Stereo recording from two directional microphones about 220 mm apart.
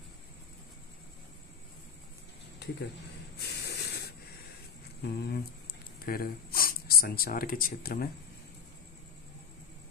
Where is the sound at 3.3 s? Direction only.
45° left (ahead or behind).